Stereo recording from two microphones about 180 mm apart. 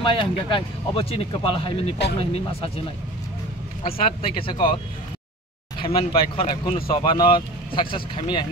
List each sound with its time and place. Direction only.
0.0 s speech: 30° left (ahead or behind)
3.8 s speech: 30° left (ahead or behind)
5.8 s speech: 30° left (ahead or behind)